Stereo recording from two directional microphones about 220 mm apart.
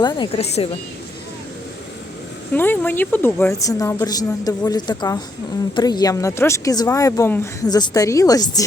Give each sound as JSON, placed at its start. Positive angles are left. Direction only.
{"t": 0.0, "sound": "speech", "side_deg": 20}
{"t": 2.5, "sound": "speech", "side_deg": 10}